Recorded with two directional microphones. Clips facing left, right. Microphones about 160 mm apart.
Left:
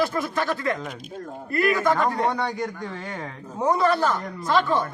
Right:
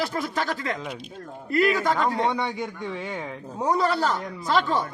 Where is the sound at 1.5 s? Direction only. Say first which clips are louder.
Right 1 dB; 20° right (ahead or behind).